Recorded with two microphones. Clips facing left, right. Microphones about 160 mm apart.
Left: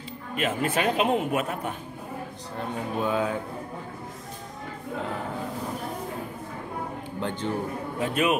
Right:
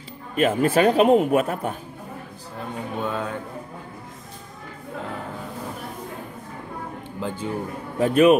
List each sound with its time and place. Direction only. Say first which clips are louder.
0.4 s a man's voice: right 8 dB; 35° right (ahead or behind)
2.6 s speech: even; centre (ahead or behind)
7.2 s speech: right 1 dB; 5° right (ahead or behind)
8.0 s a man's voice: right 9 dB; 40° right (ahead or behind)